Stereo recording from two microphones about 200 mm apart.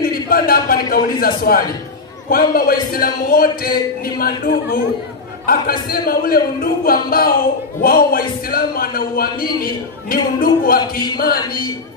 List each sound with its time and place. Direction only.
0.0 s a man's voice: 50° left (ahead or behind)
10.8 s music: 20° left (ahead or behind)